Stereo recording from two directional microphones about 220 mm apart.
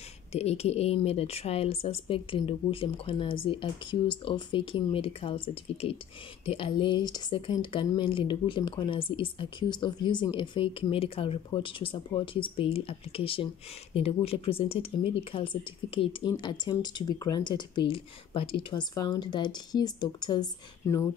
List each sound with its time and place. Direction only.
0.3 s speech: 30° left (ahead or behind)